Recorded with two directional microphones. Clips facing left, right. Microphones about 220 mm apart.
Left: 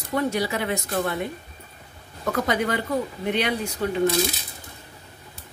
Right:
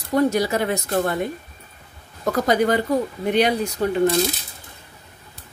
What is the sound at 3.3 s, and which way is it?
Speech, 40° right (ahead or behind).